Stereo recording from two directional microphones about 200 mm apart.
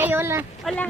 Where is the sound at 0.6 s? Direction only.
5° left (ahead or behind).